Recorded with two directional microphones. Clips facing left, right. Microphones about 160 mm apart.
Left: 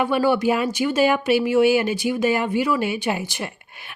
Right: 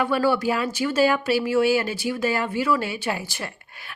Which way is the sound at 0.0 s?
20° left (ahead or behind).